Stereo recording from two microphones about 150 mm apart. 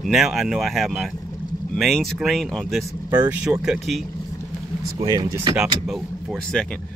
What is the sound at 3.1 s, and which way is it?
Speech, 10° right (ahead or behind).